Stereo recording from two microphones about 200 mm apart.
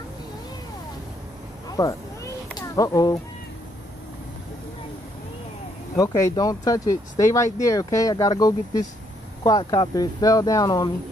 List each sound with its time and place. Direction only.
1.7 s a sound: 15° left (ahead or behind)
2.6 s speech: 15° left (ahead or behind)
5.9 s speech: 20° left (ahead or behind)